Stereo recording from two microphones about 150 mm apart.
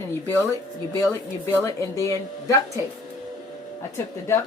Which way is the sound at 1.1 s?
20° left (ahead or behind).